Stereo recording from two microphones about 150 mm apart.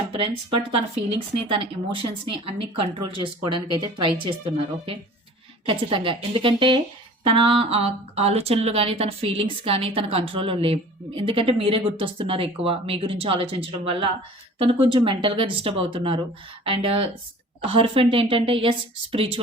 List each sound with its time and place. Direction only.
1.5 s a woman's voice: 35° right (ahead or behind)